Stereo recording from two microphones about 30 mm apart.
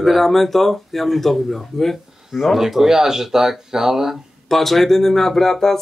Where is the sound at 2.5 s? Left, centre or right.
Centre.